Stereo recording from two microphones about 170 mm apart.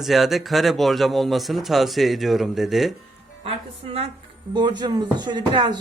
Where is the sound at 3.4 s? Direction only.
35° right (ahead or behind).